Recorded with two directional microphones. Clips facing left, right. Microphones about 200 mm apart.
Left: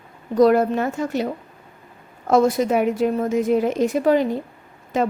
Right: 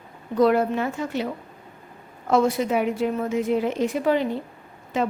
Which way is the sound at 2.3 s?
40° left (ahead or behind).